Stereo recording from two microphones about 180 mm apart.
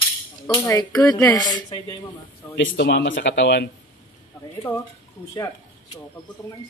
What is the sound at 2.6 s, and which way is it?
Speech, 75° left (ahead or behind).